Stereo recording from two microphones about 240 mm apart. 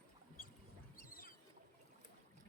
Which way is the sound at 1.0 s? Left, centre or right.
Left.